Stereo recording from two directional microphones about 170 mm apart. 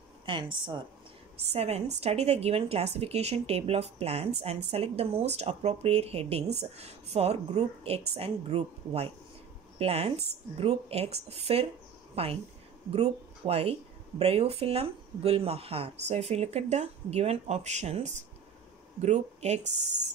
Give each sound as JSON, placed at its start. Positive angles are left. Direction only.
{"t": 0.2, "sound": "a woman's voice", "side_deg": -30}